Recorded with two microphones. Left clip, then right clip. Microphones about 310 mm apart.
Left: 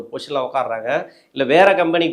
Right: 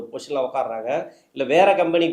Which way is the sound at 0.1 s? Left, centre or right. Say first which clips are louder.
Left 3 dB; left.